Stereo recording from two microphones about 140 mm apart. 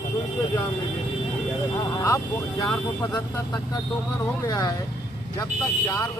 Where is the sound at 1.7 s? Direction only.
25° left (ahead or behind).